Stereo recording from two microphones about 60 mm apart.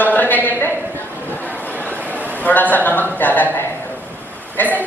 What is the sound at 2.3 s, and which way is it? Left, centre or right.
Speech, left.